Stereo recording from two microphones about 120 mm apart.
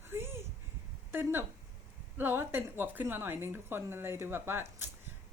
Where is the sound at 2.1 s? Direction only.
20° right (ahead or behind).